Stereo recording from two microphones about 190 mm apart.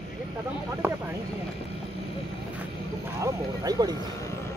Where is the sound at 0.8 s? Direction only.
10° right (ahead or behind).